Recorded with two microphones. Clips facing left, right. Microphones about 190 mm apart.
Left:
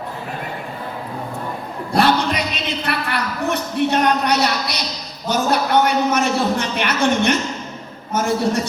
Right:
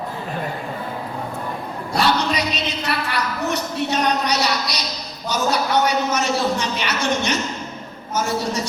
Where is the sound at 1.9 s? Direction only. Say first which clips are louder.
Left 3 dB; 55° left (ahead or behind).